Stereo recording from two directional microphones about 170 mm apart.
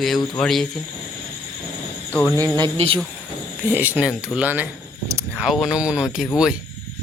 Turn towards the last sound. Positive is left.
turn(degrees=-5)  # may be behind; listen again after turning